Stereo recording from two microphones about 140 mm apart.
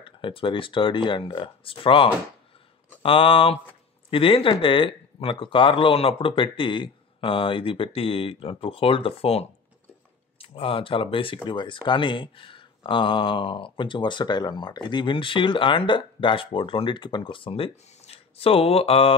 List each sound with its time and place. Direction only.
0.0 s speech: 35° left (ahead or behind)